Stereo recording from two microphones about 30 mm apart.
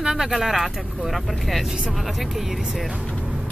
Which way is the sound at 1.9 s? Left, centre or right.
Centre.